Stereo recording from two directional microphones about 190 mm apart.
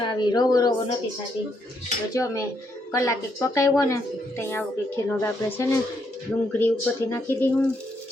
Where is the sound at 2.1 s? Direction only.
15° left (ahead or behind).